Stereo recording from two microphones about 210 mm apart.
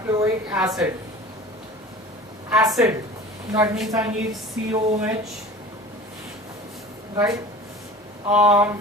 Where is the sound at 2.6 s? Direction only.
15° right (ahead or behind).